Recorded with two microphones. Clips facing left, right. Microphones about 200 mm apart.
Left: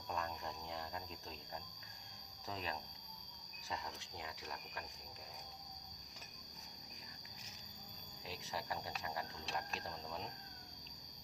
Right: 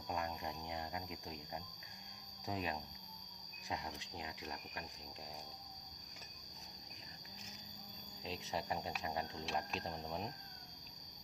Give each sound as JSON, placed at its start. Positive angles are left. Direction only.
{"t": 0.1, "sound": "cricket", "side_deg": -15}
{"t": 2.5, "sound": "speech", "side_deg": -15}
{"t": 8.3, "sound": "speech", "side_deg": -20}